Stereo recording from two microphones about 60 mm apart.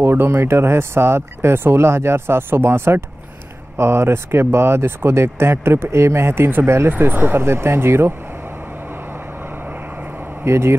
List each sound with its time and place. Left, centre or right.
0.0 s speech: right
6.9 s speech: right
10.4 s speech: right